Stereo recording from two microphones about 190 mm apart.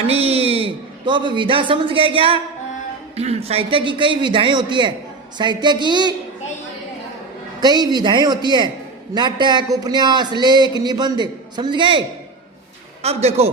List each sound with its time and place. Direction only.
0.1 s a man's voice: 30° right (ahead or behind)
7.6 s a man's voice: 20° right (ahead or behind)